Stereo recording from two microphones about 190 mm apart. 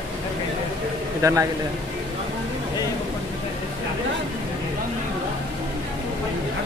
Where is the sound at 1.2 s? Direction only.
15° right (ahead or behind).